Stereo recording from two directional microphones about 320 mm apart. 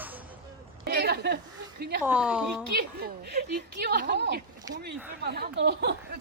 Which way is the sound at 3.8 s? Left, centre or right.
Right.